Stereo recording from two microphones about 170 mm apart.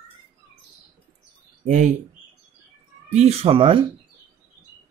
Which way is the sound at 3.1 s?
40° right (ahead or behind).